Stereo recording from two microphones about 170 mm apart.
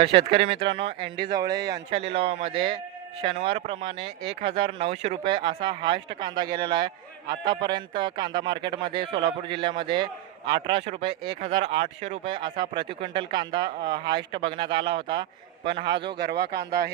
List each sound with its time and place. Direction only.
0.3 s a man's voice: 35° right (ahead or behind)
1.9 s a man's voice: 35° right (ahead or behind)
16.1 s speech: 75° right (ahead or behind)